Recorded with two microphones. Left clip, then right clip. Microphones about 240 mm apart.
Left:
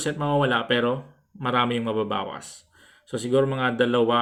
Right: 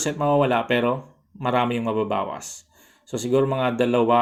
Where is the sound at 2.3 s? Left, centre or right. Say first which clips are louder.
Right 4 dB; right.